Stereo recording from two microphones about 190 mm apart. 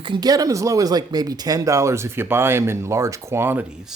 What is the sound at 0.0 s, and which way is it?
Speech, 25° right (ahead or behind).